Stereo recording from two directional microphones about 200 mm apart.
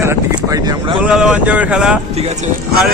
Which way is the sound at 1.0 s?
5° right (ahead or behind).